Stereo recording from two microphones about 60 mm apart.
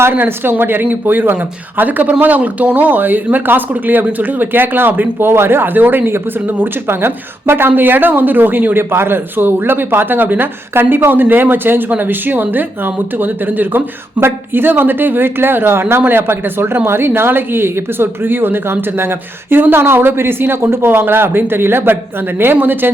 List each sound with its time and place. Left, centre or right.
0.0 s a woman's voice: right